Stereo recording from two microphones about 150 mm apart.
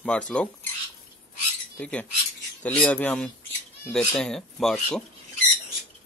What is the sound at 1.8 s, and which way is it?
Speech, 10° left (ahead or behind).